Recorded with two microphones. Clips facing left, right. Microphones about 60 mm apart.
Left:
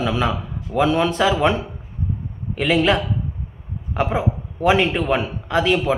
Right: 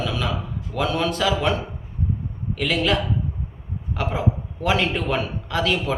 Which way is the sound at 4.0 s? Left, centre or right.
Left.